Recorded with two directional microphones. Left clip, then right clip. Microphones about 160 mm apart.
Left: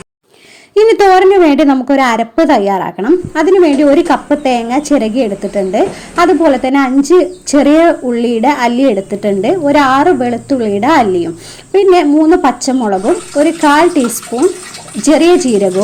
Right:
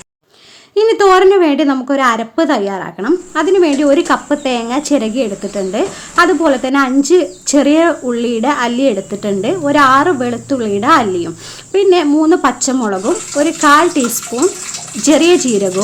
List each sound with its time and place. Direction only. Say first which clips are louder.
0.7 s a woman's voice: left 3 dB; 25° left (ahead or behind); by 15.7 s 10° left (ahead or behind)